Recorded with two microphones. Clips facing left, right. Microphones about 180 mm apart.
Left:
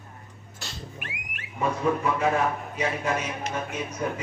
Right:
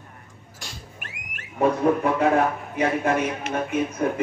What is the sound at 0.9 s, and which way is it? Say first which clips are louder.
A man's voice: left 2 dB; 45° right (ahead or behind).